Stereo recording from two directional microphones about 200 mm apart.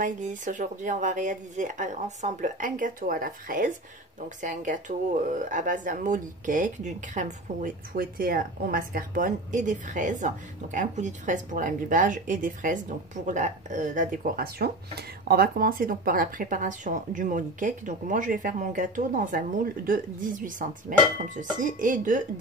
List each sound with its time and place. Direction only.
0.0 s speech: 40° right (ahead or behind)